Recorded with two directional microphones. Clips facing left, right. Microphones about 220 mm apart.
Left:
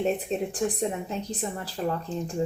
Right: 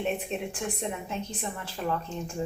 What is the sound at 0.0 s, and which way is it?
A woman's voice, 35° left (ahead or behind).